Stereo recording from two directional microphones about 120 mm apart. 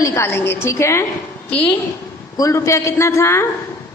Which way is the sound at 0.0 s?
25° left (ahead or behind).